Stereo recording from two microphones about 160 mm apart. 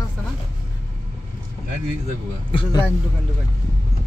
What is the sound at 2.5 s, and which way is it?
Speech, 30° left (ahead or behind).